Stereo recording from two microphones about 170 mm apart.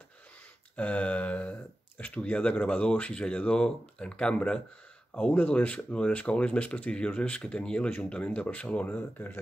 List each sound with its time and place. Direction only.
0.7 s speech: 10° left (ahead or behind)